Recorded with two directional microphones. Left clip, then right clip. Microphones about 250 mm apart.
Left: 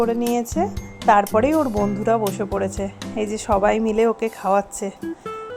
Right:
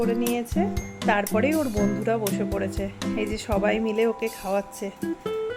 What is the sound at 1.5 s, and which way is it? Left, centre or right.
Speech, centre.